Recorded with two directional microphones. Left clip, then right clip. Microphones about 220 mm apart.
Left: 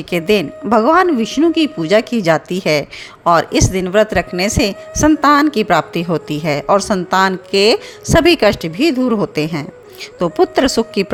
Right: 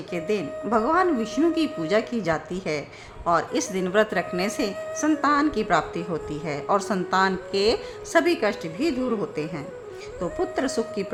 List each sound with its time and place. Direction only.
0.1 s speech: 40° left (ahead or behind)